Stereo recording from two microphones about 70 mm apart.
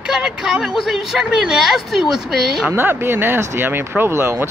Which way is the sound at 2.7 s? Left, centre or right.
Right.